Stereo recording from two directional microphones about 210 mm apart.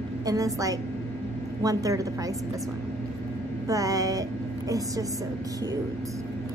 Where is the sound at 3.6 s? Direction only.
15° right (ahead or behind).